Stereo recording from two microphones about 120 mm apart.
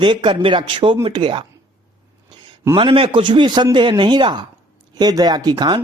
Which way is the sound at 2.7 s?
45° right (ahead or behind).